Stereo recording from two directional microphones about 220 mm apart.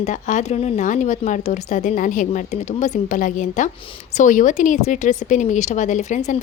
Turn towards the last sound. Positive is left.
turn(degrees=30)  # may be behind; listen again after turning